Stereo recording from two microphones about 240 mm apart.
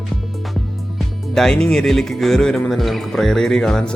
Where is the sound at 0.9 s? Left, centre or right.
Centre.